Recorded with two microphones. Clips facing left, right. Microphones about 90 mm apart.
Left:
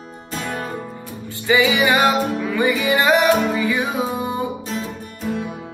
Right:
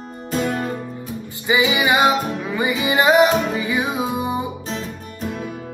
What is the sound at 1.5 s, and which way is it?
Music, 20° right (ahead or behind).